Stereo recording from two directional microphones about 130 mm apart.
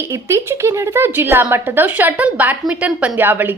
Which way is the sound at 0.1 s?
20° right (ahead or behind).